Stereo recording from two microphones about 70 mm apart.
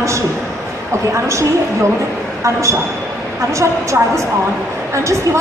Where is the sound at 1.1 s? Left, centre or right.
Right.